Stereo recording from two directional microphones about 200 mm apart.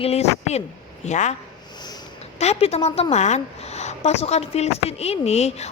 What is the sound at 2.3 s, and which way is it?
Speech, 30° left (ahead or behind).